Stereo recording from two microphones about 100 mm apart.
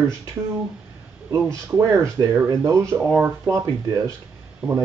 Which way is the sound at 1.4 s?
30° right (ahead or behind).